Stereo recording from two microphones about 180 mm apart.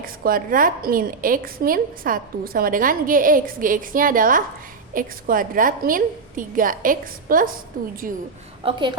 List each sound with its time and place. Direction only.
0.0 s a woman's voice: 55° right (ahead or behind)